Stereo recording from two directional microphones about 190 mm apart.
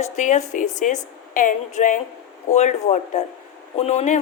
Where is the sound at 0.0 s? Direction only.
40° left (ahead or behind).